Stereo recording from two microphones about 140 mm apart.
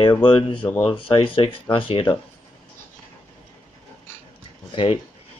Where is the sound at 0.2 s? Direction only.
40° left (ahead or behind).